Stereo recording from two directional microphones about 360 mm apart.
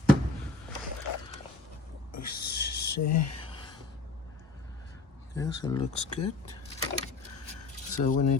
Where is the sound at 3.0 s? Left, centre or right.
Left.